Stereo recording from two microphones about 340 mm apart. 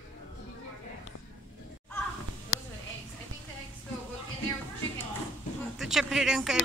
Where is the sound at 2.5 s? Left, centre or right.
Left.